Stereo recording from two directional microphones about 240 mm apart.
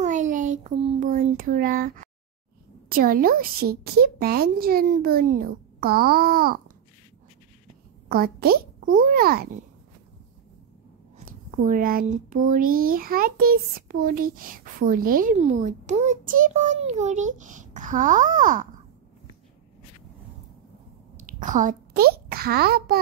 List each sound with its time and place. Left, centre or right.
0.0 s a sound: right
2.9 s a child's voice: right
8.1 s a child's voice: right
11.1 s a child's voice: right
21.2 s a child's voice: right